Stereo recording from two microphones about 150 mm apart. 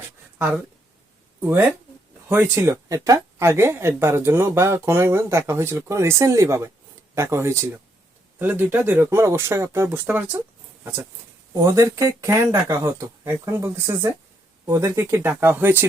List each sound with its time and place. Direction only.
1.4 s speech: 10° right (ahead or behind)
11.5 s speech: 20° right (ahead or behind)